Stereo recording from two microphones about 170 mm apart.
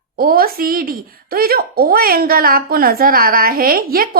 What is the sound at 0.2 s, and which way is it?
Speech, 60° right (ahead or behind).